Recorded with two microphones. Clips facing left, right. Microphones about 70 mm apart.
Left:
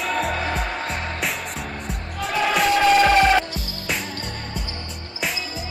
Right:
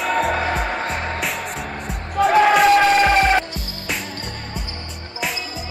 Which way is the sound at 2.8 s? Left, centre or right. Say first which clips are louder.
Even; right.